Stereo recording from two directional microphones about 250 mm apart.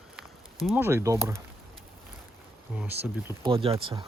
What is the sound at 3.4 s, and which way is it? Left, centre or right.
Speech, right.